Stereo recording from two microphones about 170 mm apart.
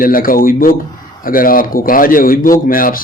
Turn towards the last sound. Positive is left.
turn(degrees=55)  # may be behind; listen again after turning